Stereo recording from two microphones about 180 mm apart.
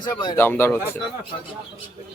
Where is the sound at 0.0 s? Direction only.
25° left (ahead or behind).